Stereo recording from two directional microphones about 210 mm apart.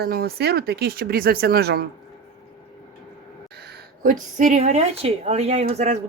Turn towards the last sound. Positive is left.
turn(degrees=-30)  # may be behind; listen again after turning